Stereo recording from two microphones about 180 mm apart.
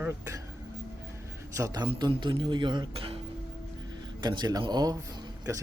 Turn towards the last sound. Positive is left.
turn(degrees=-15)  # may be behind; listen again after turning